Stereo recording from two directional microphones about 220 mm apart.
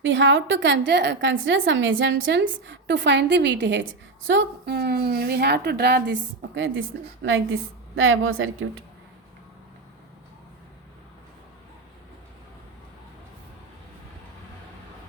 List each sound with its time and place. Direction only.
0.0 s a woman's voice: 55° right (ahead or behind)